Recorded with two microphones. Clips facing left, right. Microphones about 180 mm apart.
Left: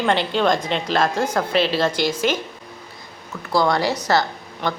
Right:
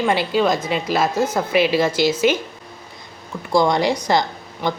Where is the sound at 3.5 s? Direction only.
15° right (ahead or behind).